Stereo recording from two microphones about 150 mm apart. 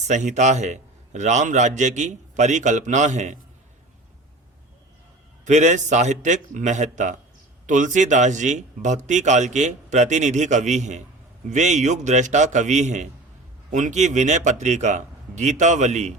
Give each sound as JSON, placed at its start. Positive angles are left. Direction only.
{"t": 0.1, "sound": "speech", "side_deg": -55}
{"t": 5.5, "sound": "speech", "side_deg": -50}